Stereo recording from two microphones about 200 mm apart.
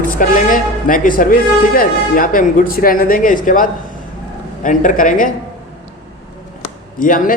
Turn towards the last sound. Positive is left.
turn(degrees=40)  # may be behind; listen again after turning